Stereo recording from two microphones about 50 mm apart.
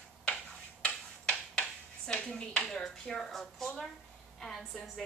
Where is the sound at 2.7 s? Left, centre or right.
Centre.